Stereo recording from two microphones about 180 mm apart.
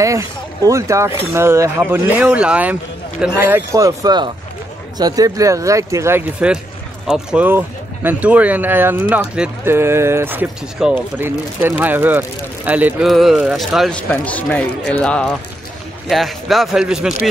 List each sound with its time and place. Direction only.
0.0 s speech: 20° right (ahead or behind)